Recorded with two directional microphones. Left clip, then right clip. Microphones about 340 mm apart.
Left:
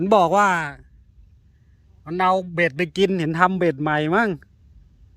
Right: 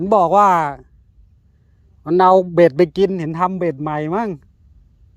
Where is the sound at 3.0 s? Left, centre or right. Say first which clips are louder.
Even; centre.